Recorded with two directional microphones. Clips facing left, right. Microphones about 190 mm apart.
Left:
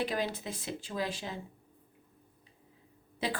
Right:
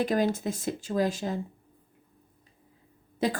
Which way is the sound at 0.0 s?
45° right (ahead or behind).